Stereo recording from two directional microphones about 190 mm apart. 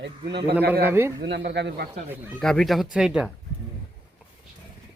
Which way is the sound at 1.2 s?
60° right (ahead or behind).